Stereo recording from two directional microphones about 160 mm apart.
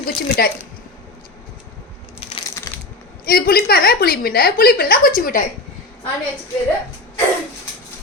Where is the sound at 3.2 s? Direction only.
70° left (ahead or behind).